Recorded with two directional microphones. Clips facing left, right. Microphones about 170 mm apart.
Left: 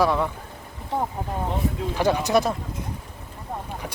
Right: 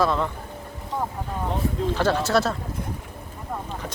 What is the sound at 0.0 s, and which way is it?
Speech, 10° left (ahead or behind).